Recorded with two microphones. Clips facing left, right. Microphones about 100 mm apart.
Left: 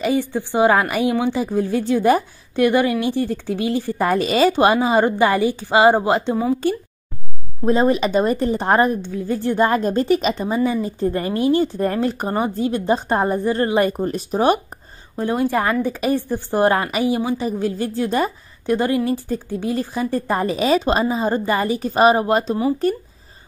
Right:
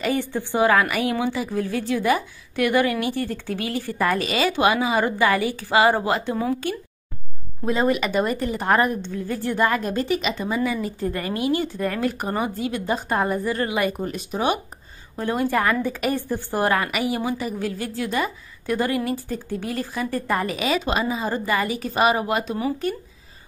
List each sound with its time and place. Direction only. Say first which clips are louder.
0.0 s a woman's voice: left 4 dB; 15° left (ahead or behind); by 2.6 s 35° left (ahead or behind)
2.6 s a woman's voice: left 4 dB; 20° left (ahead or behind)
7.6 s a woman's voice: left 5 dB; 30° left (ahead or behind)
8.9 s a woman's voice: left 4 dB; 15° left (ahead or behind)
9.4 s speech: left 4 dB; 25° left (ahead or behind)
15.1 s a woman's voice: left 3 dB; 20° left (ahead or behind)